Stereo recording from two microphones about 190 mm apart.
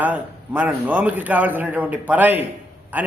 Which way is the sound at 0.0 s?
10° right (ahead or behind).